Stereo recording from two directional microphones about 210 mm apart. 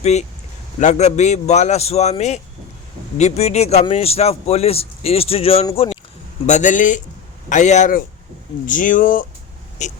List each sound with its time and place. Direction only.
0.0 s a man's voice: 30° left (ahead or behind)